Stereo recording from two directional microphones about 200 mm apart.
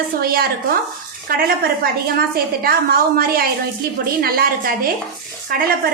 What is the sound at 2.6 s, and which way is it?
A woman's voice, 50° right (ahead or behind).